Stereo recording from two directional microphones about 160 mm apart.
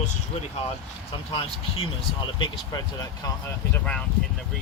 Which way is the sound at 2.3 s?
30° left (ahead or behind).